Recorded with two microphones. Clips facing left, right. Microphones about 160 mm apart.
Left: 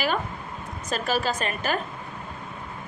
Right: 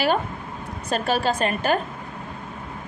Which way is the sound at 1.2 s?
30° right (ahead or behind).